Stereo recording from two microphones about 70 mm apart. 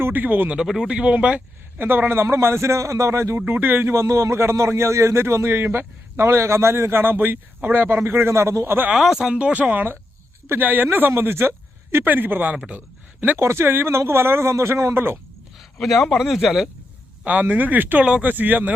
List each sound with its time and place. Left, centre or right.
0.0 s speech: right
0.5 s speech: centre
1.8 s speech: right
3.4 s speech: right
9.0 s speech: centre
9.3 s speech: centre
12.5 s speech: centre
13.4 s speech: right
15.8 s speech: centre
17.2 s speech: right
18.0 s speech: centre
18.3 s speech: right